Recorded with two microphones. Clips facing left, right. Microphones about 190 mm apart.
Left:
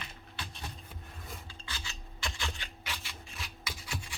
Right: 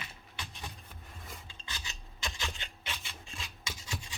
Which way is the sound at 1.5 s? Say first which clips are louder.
Left 1 dB; 20° right (ahead or behind).